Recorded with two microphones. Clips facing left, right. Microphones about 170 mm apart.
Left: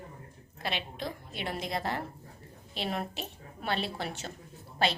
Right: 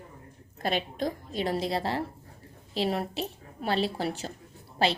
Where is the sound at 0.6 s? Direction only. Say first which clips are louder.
Right 7 dB; 45° right (ahead or behind).